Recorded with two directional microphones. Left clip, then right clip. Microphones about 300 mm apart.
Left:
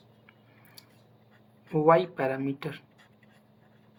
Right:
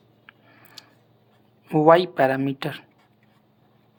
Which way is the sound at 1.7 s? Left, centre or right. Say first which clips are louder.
Right 6 dB; right.